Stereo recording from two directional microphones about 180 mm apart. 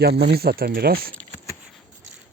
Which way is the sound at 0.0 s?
65° right (ahead or behind).